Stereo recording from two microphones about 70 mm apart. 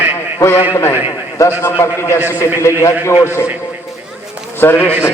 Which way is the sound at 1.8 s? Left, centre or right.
Left.